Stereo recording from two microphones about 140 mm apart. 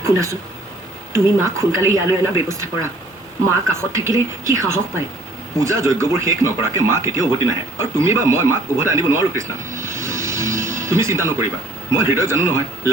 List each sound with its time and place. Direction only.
0.0 s speech: 20° right (ahead or behind)
3.7 s speech: 20° right (ahead or behind)